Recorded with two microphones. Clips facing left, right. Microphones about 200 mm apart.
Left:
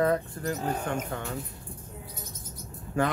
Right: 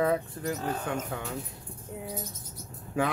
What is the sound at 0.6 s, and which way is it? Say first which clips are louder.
Speech: left 2 dB; 15° left (ahead or behind).